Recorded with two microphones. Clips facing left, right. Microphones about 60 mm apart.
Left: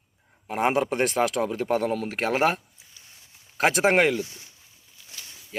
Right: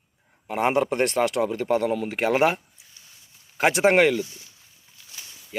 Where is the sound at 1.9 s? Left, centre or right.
Centre.